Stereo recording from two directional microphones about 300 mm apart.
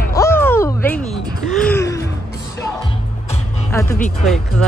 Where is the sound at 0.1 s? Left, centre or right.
Centre.